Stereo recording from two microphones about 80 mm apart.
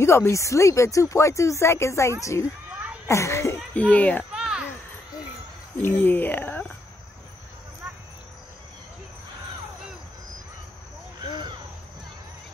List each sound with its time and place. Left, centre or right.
0.0 s speech: left
2.4 s a sound: centre
3.1 s speech: left
3.7 s speech: centre
4.3 s a sound: centre
5.8 s speech: left